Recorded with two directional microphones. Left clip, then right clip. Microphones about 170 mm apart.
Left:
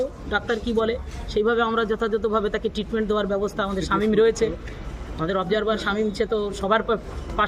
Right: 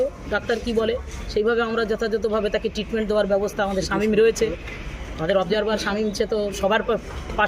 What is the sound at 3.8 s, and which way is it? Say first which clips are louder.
Speech: even; 35° left (ahead or behind).